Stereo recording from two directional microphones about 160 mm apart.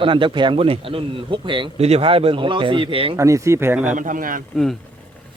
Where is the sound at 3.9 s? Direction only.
55° right (ahead or behind).